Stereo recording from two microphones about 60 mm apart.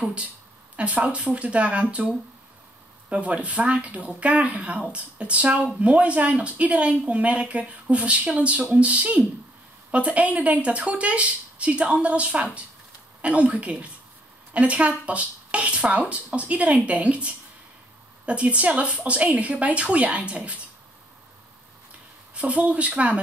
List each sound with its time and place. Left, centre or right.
0.7 s speech: right
22.3 s speech: right